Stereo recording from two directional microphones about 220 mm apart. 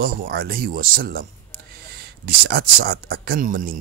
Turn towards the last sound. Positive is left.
turn(degrees=-35)  # may be behind; listen again after turning